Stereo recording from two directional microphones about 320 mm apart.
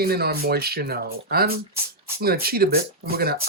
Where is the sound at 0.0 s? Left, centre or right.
Right.